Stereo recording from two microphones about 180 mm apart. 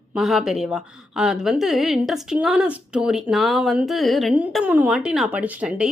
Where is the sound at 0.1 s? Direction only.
Centre (ahead or behind).